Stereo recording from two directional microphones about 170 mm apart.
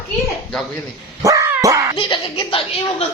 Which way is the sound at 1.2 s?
20° right (ahead or behind).